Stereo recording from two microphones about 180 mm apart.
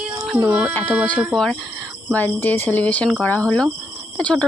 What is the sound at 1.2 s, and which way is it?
Speech, 5° left (ahead or behind).